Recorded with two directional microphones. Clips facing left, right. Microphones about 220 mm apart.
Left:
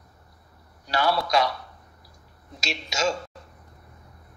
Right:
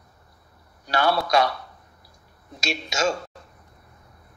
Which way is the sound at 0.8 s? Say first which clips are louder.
Right 2 dB; 55° right (ahead or behind).